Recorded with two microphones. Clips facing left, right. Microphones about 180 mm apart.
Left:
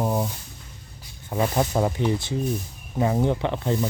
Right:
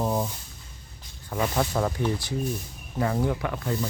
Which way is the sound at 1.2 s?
25° left (ahead or behind).